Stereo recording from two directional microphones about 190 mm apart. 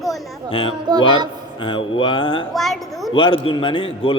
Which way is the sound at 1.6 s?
25° left (ahead or behind).